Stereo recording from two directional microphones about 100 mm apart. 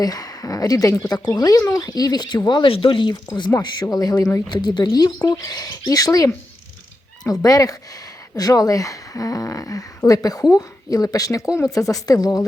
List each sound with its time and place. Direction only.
0.0 s speech: 40° left (ahead or behind)
2.5 s speech: 55° left (ahead or behind); by 12.5 s 40° left (ahead or behind)